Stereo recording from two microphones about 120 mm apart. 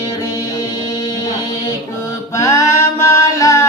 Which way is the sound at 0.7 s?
30° left (ahead or behind).